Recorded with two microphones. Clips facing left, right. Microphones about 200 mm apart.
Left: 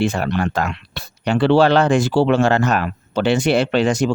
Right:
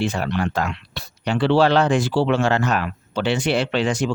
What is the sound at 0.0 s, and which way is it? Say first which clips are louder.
Speech: left 3 dB; 50° left (ahead or behind).